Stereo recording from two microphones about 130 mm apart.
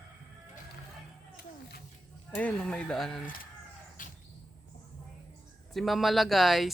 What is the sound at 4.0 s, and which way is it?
Bird, 90° left.